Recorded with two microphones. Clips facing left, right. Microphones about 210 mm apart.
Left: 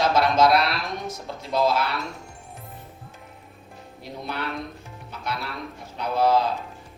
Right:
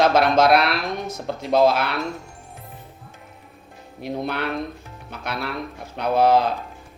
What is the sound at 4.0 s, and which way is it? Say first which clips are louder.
Speech: right 7 dB; 60° right (ahead or behind).